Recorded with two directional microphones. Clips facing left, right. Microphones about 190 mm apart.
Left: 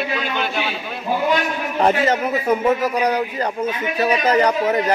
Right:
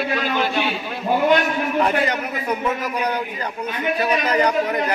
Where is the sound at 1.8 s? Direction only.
45° left (ahead or behind).